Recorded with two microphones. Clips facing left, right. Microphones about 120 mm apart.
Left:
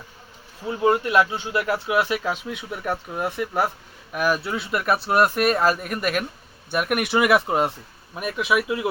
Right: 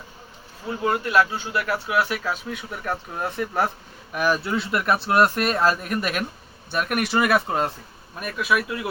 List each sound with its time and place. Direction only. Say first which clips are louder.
0.8 s a man's voice: left 2 dB; 20° left (ahead or behind)